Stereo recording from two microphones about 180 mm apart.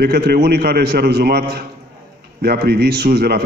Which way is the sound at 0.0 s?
60° right (ahead or behind).